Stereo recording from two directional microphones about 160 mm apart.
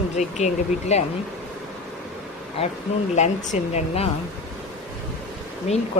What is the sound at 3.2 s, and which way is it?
Speech, 45° left (ahead or behind).